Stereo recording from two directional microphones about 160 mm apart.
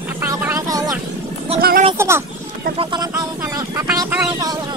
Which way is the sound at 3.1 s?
20° right (ahead or behind).